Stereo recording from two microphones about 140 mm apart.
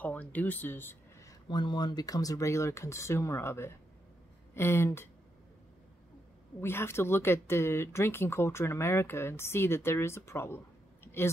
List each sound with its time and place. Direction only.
0.0 s speech: 10° left (ahead or behind)
1.5 s speech: 30° left (ahead or behind)
6.6 s speech: 15° left (ahead or behind)